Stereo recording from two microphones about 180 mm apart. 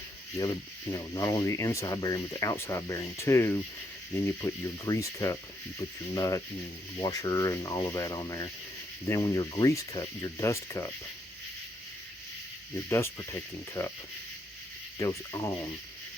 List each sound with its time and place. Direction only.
0.3 s speech: 20° left (ahead or behind)
12.9 s speech: 15° left (ahead or behind)
14.9 s speech: 15° left (ahead or behind)